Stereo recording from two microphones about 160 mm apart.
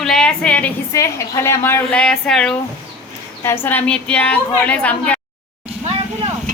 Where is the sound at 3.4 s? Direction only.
15° left (ahead or behind).